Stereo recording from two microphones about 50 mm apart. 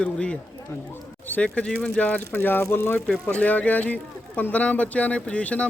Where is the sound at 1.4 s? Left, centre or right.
Left.